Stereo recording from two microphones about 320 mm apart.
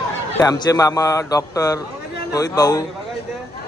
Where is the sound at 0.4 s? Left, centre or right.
Centre.